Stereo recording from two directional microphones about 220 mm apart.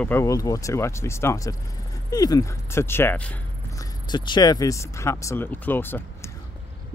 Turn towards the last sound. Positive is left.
turn(degrees=10)  # may be behind; listen again after turning